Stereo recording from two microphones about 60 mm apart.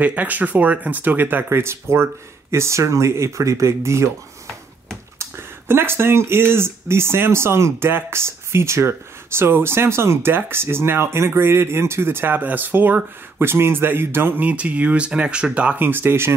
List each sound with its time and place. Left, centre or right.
0.0 s speech: right
5.2 s speech: right
14.5 s speech: right